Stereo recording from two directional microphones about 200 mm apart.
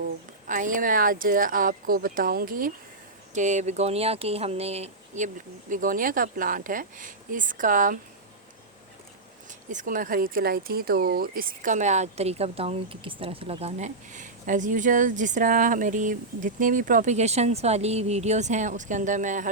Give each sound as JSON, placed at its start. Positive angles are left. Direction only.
{"t": 0.4, "sound": "speech", "side_deg": -40}
{"t": 9.5, "sound": "speech", "side_deg": -40}